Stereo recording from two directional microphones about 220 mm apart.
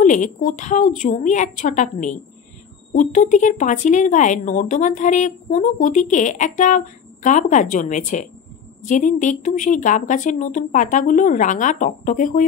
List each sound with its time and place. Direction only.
0.0 s speech: 35° left (ahead or behind)